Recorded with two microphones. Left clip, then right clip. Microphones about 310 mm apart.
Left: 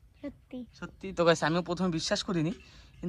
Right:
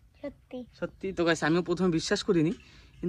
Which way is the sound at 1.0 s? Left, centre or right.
Centre.